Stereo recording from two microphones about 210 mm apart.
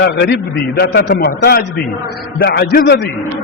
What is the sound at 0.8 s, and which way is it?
A man's voice, 50° left (ahead or behind).